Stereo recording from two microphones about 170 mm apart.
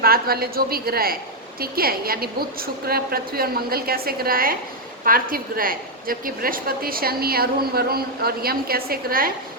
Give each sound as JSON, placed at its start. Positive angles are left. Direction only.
{"t": 0.0, "sound": "a woman's voice", "side_deg": -65}